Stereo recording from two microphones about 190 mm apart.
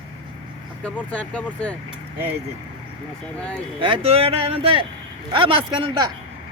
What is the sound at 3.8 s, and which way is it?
Speech, 30° right (ahead or behind).